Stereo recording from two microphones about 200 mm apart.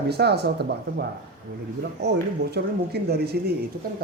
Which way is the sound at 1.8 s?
60° right (ahead or behind).